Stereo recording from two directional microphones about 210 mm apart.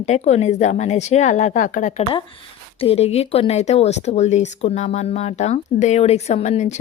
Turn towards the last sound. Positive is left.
turn(degrees=35)  # may be behind; listen again after turning